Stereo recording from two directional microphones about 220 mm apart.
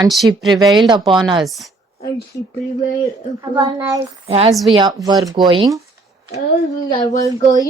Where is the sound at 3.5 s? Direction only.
20° right (ahead or behind).